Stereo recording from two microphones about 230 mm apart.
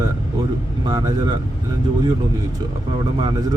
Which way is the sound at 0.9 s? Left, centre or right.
Centre.